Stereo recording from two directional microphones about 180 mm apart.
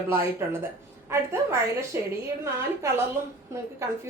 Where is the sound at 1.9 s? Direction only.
15° right (ahead or behind).